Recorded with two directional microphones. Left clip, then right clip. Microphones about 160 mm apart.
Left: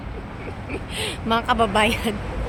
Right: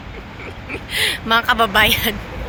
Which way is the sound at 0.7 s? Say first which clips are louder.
Right 9 dB; centre (ahead or behind).